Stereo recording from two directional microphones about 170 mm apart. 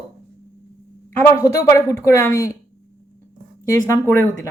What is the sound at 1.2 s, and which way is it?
A woman's voice, 15° left (ahead or behind).